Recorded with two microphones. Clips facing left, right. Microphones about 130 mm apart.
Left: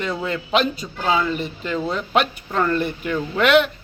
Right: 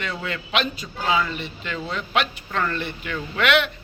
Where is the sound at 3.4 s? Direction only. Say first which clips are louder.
Left 5 dB; 40° left (ahead or behind).